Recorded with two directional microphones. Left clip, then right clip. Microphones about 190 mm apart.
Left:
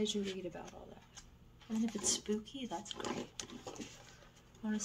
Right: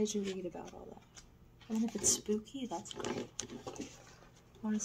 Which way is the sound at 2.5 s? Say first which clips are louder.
Right 2 dB; centre (ahead or behind).